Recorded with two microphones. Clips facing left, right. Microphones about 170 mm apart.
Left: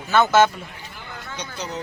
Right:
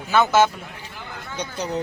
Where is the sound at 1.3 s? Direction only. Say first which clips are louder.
Right 5 dB; 55° right (ahead or behind).